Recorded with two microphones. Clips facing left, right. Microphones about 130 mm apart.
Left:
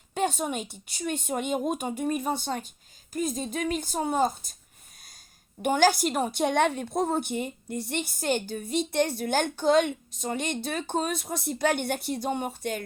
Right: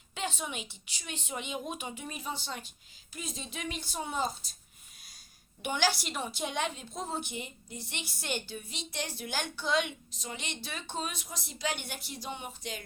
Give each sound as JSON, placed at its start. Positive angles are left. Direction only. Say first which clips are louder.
{"t": 0.1, "sound": "a woman's voice", "louder": "left 9 dB", "side_deg": 50}
{"t": 5.6, "sound": "a woman's voice", "louder": "left 9 dB", "side_deg": 45}